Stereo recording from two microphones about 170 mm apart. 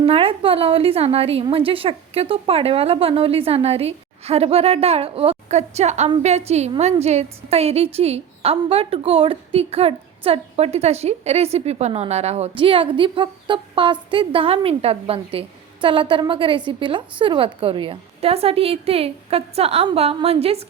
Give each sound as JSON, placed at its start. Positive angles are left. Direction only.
{"t": 0.0, "sound": "a woman's voice", "side_deg": -35}